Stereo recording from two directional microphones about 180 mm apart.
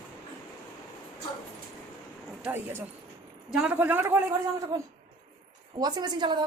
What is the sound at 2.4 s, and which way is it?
A man's voice, 10° right (ahead or behind).